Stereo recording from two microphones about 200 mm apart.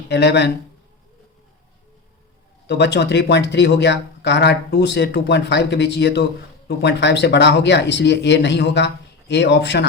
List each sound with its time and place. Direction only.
0.1 s speech: 60° left (ahead or behind)
2.6 s speech: 60° left (ahead or behind)